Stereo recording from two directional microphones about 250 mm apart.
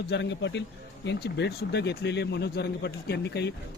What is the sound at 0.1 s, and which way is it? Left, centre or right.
Speech, left.